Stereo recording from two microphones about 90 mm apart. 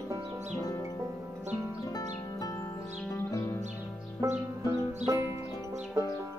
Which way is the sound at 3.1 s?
35° left (ahead or behind).